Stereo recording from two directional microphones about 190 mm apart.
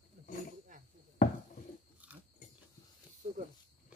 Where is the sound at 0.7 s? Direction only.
40° right (ahead or behind).